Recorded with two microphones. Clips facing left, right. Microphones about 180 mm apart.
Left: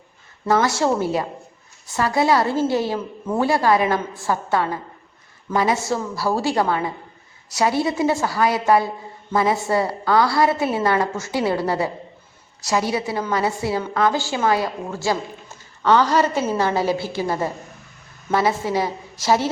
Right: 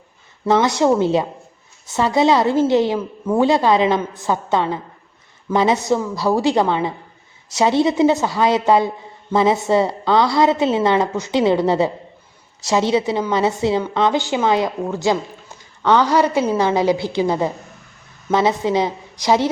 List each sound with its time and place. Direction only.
0.4 s a woman's voice: 20° right (ahead or behind)